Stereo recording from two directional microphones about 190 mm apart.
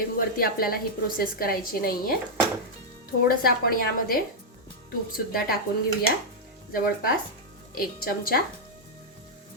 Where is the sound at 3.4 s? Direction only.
50° left (ahead or behind).